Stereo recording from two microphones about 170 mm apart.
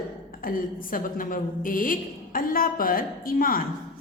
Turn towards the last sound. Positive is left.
turn(degrees=60)  # may be behind; listen again after turning